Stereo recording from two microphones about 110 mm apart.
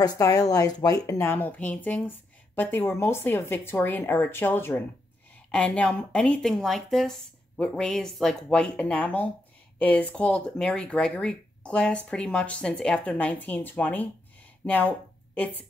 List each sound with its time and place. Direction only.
0.0 s speech: 30° left (ahead or behind); by 15.6 s 15° left (ahead or behind)